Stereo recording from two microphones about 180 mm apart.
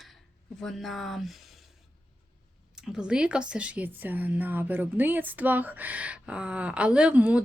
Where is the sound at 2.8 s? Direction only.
5° right (ahead or behind).